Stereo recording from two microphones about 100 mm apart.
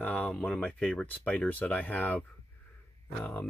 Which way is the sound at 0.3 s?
5° left (ahead or behind).